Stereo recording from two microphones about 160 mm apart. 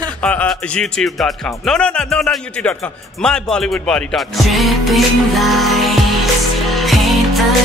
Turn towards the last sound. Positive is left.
turn(degrees=0)  # may be behind; listen again after turning